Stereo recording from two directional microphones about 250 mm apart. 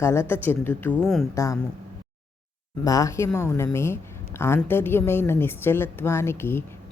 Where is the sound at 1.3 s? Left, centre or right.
Centre.